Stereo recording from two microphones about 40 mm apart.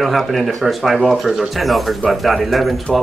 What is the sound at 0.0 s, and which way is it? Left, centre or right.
Speech, centre.